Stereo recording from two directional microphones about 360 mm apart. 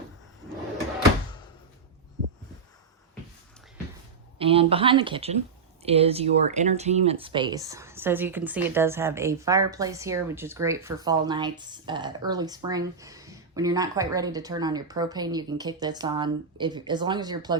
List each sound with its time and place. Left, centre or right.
4.4 s speech: centre